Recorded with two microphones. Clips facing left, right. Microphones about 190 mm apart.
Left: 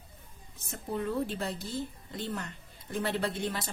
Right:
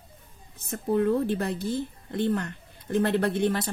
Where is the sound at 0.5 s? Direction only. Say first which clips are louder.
Right 10 dB; 60° right (ahead or behind).